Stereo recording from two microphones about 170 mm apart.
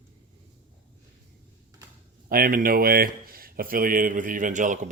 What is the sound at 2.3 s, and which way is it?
Speech, 55° right (ahead or behind).